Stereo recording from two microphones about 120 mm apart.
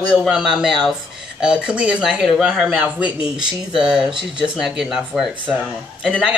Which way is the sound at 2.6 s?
10° right (ahead or behind).